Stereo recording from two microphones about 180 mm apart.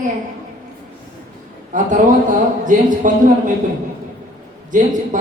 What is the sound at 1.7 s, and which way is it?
A man's voice, 45° right (ahead or behind).